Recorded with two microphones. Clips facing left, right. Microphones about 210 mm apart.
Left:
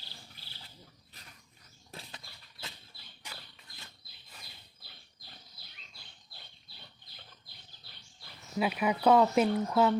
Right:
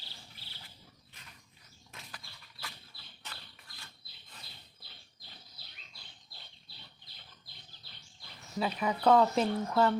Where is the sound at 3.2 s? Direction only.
10° left (ahead or behind).